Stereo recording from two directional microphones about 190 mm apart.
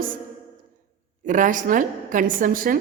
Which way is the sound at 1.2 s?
45° right (ahead or behind).